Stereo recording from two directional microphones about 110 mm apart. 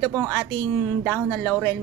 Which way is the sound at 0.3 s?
15° left (ahead or behind).